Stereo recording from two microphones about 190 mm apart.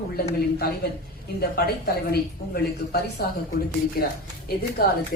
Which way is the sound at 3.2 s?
55° left (ahead or behind).